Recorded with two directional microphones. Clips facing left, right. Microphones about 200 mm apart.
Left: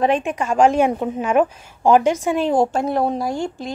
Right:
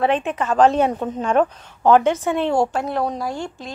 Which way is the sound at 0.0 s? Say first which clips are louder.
Left 1 dB; 15° left (ahead or behind).